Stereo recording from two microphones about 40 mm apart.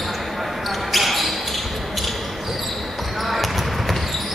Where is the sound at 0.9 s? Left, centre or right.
Centre.